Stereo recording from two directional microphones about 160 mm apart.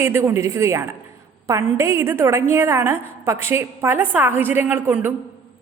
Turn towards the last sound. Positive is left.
turn(degrees=-10)  # may be behind; listen again after turning